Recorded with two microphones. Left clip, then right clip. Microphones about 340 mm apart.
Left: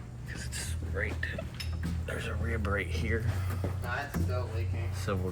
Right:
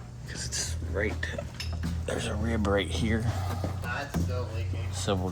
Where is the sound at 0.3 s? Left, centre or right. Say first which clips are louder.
Right 6 dB; centre.